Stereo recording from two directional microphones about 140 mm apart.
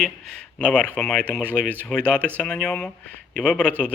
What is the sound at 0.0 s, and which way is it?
Speech, 5° left (ahead or behind).